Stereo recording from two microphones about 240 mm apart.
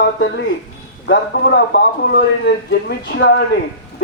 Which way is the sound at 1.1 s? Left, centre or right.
Left.